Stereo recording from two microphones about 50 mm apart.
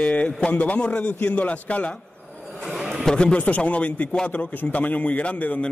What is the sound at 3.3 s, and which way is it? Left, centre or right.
A man's voice, left.